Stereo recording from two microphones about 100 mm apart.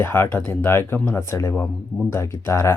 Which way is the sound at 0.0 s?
25° left (ahead or behind).